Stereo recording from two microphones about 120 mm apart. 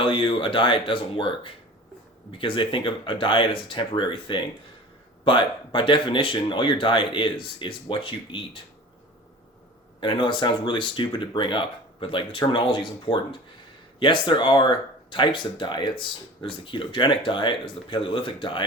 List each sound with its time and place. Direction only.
0.0 s speech: 45° left (ahead or behind)
2.4 s speech: 45° left (ahead or behind)
10.0 s speech: 40° left (ahead or behind)